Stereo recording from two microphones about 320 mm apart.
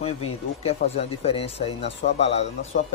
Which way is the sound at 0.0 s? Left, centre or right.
Centre.